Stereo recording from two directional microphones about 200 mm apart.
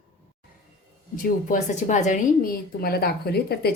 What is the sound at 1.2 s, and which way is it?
A woman's voice, 40° left (ahead or behind).